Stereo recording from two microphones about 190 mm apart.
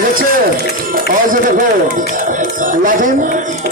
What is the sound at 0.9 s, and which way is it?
Speech, 45° right (ahead or behind).